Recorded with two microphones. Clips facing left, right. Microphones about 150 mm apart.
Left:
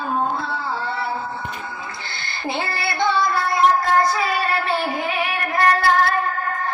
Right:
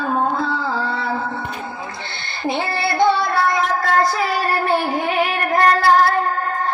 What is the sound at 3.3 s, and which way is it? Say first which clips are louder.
Child singing: left 1 dB; 90° right.